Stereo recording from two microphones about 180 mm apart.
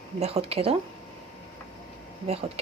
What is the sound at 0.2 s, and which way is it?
Speech, 35° right (ahead or behind).